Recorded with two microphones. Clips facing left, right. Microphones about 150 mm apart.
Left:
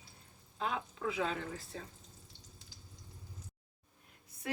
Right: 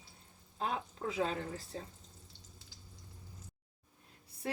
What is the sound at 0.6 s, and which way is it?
Speech, 35° right (ahead or behind).